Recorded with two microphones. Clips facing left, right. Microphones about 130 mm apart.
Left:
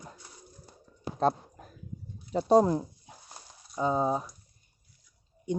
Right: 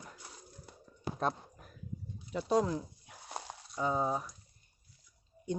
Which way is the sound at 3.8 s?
20° left (ahead or behind).